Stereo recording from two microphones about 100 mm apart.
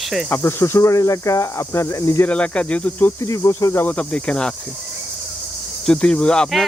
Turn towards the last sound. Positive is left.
turn(degrees=5)  # may be behind; listen again after turning